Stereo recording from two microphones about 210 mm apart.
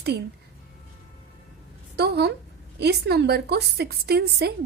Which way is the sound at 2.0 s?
50° right (ahead or behind).